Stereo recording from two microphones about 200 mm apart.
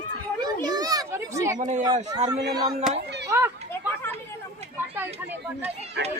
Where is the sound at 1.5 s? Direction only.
35° right (ahead or behind).